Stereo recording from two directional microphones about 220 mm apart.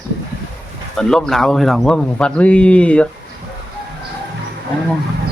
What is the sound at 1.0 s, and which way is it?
Speech, 5° left (ahead or behind).